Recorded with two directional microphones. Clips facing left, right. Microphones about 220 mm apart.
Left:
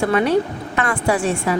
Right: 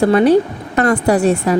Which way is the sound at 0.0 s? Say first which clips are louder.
Right 6 dB; 35° right (ahead or behind).